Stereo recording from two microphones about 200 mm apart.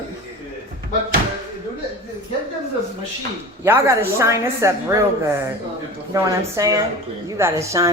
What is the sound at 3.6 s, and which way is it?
A woman's voice, 10° right (ahead or behind).